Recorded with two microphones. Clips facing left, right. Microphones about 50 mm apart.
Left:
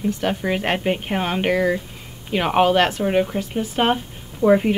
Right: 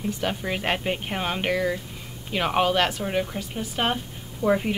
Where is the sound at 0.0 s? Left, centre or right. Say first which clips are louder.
Left 5 dB; centre.